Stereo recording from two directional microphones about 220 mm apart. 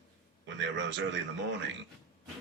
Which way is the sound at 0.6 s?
55° right (ahead or behind).